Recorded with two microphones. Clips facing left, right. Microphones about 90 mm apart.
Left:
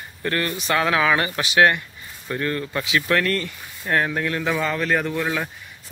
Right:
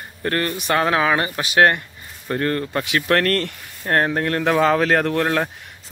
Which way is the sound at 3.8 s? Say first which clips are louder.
Right 3 dB; 45° right (ahead or behind).